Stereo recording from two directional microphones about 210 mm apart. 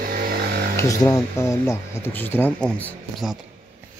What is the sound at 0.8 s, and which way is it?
Speech, 15° left (ahead or behind).